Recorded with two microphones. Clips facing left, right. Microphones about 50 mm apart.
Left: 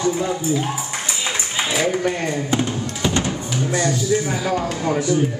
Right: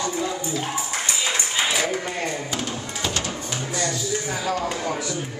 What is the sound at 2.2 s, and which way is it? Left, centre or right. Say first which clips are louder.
Speech: left 6 dB; centre.